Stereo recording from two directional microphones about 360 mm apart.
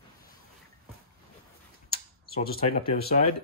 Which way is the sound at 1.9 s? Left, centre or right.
Left.